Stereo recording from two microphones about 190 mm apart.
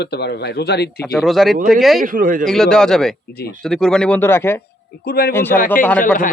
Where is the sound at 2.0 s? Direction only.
45° right (ahead or behind).